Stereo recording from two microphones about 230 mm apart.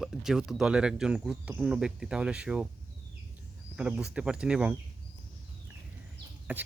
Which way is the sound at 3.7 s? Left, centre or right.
Centre.